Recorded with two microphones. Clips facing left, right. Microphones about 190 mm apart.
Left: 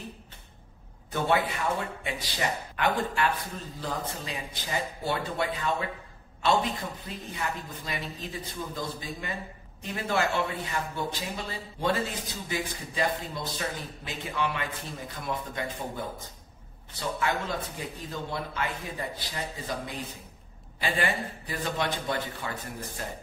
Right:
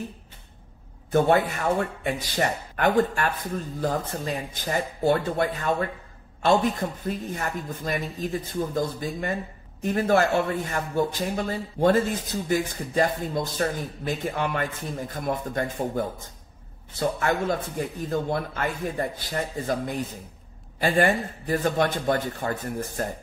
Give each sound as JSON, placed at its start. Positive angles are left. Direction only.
{"t": 1.1, "sound": "a man's voice", "side_deg": -45}
{"t": 17.0, "sound": "a man's voice", "side_deg": -45}